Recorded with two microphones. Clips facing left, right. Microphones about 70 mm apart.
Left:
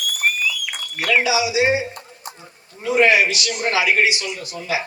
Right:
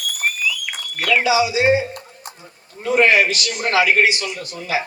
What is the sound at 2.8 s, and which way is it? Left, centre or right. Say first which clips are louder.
A man's voice: right 1 dB; right.